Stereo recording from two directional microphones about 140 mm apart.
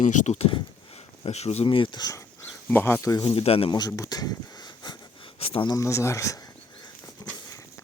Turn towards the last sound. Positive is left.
turn(degrees=25)  # may be behind; listen again after turning